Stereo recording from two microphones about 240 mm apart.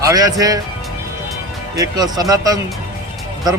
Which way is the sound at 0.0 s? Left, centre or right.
Centre.